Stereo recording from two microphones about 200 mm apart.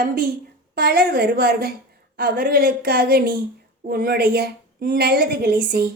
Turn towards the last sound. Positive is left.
turn(degrees=-50)  # may be behind; listen again after turning